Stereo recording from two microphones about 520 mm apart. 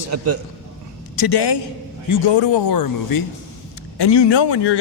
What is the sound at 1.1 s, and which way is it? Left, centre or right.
Speech, left.